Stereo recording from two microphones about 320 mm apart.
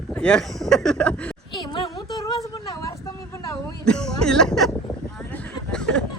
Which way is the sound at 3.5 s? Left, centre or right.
Centre.